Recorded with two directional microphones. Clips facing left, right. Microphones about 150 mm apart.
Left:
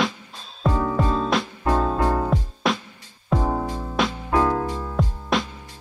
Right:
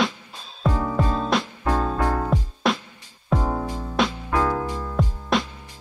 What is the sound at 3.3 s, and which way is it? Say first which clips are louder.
Music: left 1 dB; 15° left (ahead or behind).